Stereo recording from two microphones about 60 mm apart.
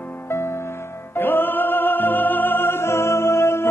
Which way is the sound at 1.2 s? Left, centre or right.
Left.